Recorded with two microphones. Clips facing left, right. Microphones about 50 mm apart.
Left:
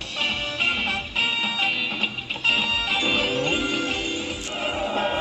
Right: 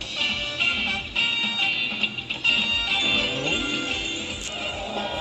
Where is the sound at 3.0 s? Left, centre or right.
Centre.